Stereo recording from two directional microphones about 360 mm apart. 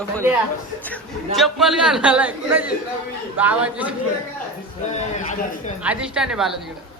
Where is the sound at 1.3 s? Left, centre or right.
Centre.